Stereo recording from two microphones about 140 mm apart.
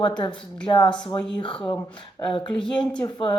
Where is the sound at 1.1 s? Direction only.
35° left (ahead or behind).